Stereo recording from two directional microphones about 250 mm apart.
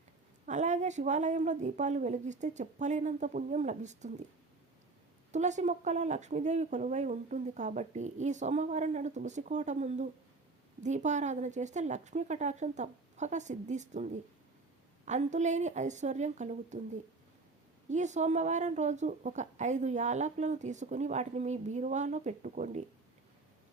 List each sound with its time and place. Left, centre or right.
0.4 s a woman's voice: right
5.3 s a woman's voice: right
17.8 s a woman's voice: right